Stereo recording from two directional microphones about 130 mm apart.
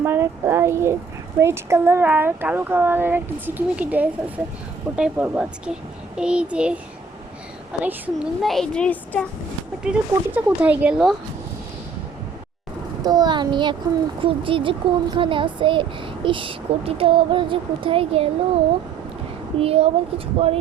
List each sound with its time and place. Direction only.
0.0 s speech: 20° right (ahead or behind)
8.4 s speech: centre (ahead or behind)
9.9 s speech: 5° right (ahead or behind)
13.0 s speech: 30° right (ahead or behind); by 18.3 s 45° right (ahead or behind)
19.5 s speech: 50° right (ahead or behind)